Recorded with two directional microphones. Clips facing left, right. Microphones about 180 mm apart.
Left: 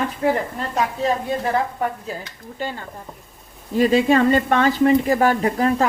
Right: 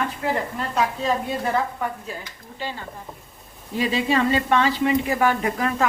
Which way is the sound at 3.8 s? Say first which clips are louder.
Left 6 dB; 50° left (ahead or behind).